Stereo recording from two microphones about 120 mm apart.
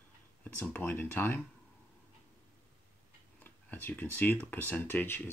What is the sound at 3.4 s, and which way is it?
Speech, 15° left (ahead or behind).